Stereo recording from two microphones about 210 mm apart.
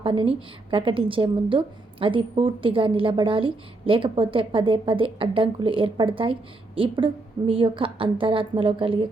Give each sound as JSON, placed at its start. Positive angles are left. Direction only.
{"t": 0.0, "sound": "a woman's voice", "side_deg": -25}